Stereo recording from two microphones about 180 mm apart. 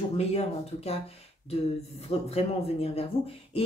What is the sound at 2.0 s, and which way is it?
Speech, 35° left (ahead or behind).